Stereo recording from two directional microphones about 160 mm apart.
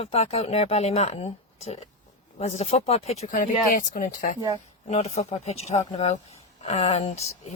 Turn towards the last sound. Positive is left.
turn(degrees=40)  # may be behind; listen again after turning